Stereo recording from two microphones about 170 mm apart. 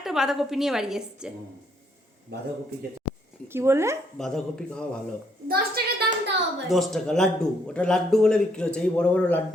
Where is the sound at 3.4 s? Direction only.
15° right (ahead or behind).